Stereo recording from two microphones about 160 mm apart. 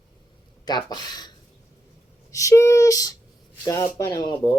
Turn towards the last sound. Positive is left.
turn(degrees=25)  # may be behind; listen again after turning